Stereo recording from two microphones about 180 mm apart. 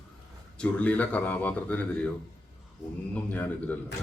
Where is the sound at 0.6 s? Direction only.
5° left (ahead or behind).